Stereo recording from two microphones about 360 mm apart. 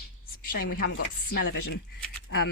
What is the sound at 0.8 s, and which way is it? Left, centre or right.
Chopping, left.